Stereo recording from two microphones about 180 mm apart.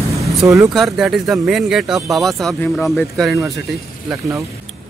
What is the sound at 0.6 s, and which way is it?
Speech, centre (ahead or behind).